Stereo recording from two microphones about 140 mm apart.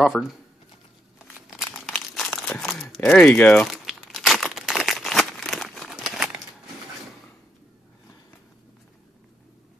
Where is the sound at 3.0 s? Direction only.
10° left (ahead or behind).